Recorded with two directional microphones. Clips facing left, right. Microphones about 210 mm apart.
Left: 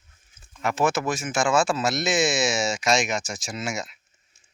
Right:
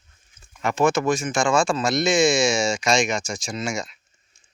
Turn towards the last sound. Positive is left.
turn(degrees=5)  # may be behind; listen again after turning